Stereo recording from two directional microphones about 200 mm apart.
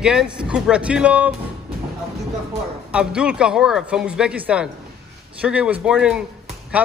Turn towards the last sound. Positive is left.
turn(degrees=-5)  # may be behind; listen again after turning